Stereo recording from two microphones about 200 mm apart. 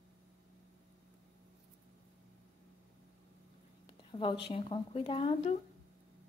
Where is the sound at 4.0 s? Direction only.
25° left (ahead or behind).